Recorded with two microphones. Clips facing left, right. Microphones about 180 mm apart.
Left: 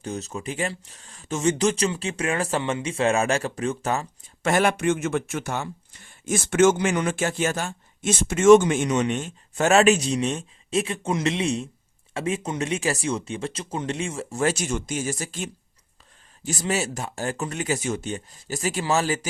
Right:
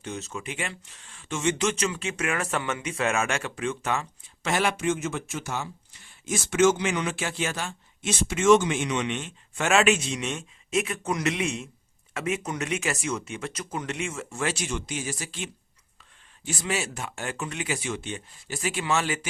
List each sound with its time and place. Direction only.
0.0 s speech: 40° left (ahead or behind)
4.4 s speech: 50° left (ahead or behind)